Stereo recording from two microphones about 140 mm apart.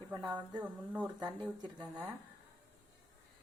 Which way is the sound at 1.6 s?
30° right (ahead or behind).